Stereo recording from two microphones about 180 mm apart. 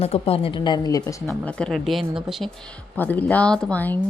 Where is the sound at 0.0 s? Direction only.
35° left (ahead or behind).